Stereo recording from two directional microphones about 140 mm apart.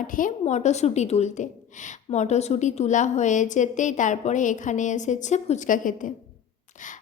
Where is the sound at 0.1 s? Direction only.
75° left (ahead or behind).